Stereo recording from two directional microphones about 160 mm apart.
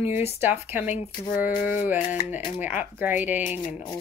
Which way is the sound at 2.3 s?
10° right (ahead or behind).